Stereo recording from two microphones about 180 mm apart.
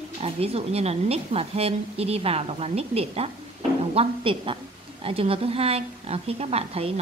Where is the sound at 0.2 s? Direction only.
35° right (ahead or behind).